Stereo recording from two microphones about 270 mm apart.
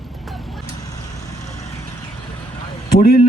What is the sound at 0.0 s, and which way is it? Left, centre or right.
Vehicle, centre.